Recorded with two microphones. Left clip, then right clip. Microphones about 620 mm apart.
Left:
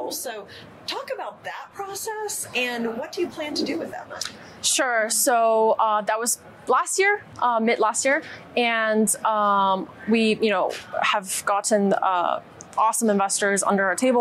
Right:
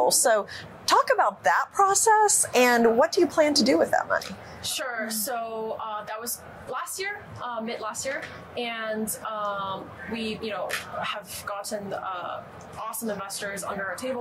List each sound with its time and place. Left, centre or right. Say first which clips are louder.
0.1 s a woman's voice: right 10 dB; right
3.0 s a woman's voice: right 8 dB; right
4.6 s speech: left 9 dB; left